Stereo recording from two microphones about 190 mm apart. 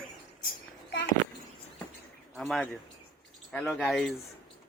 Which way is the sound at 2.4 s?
Centre (ahead or behind).